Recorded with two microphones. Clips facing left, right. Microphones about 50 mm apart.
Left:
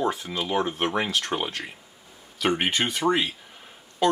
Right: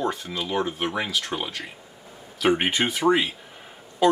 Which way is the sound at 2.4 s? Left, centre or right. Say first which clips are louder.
Right 2 dB; centre.